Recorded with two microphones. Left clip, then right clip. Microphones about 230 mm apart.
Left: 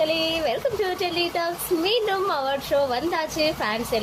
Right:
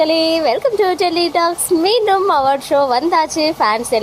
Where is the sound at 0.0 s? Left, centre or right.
Right.